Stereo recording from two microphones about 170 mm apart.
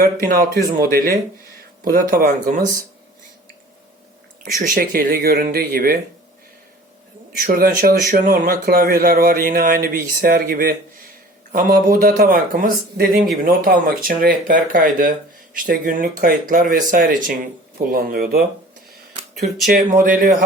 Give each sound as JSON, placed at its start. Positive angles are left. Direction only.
{"t": 0.3, "sound": "speech", "side_deg": -60}
{"t": 4.6, "sound": "speech", "side_deg": -55}
{"t": 7.3, "sound": "speech", "side_deg": -55}
{"t": 19.6, "sound": "speech", "side_deg": -55}